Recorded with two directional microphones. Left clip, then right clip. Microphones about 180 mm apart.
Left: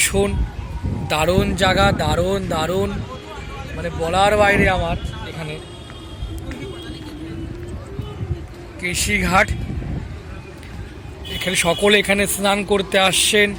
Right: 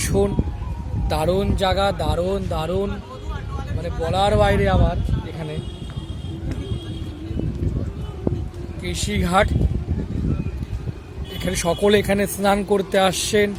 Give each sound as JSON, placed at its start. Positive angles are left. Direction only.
{"t": 0.0, "sound": "a man's voice", "side_deg": -25}
{"t": 8.8, "sound": "speech", "side_deg": -15}
{"t": 11.3, "sound": "speech", "side_deg": -25}